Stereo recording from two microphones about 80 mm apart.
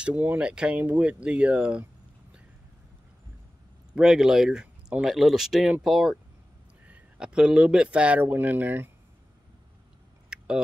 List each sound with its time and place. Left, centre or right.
0.0 s speech: right
3.9 s speech: centre
6.9 s speech: centre
10.3 s a sound: centre